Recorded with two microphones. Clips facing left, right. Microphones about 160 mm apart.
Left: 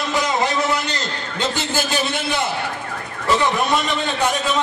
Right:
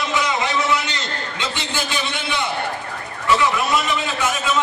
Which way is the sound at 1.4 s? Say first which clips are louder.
Left 5 dB; 45° left (ahead or behind).